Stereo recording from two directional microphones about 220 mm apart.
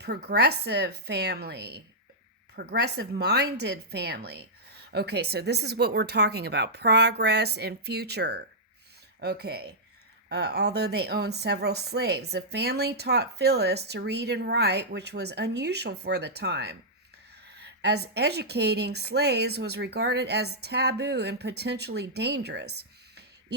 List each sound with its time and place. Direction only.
0.0 s a woman's voice: 45° right (ahead or behind)
17.6 s a sound: 50° right (ahead or behind)
18.1 s a woman's voice: 50° right (ahead or behind)